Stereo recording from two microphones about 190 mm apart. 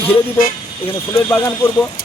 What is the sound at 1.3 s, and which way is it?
Speech, 10° left (ahead or behind).